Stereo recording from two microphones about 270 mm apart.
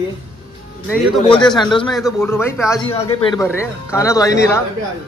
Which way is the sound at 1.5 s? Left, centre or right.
Centre.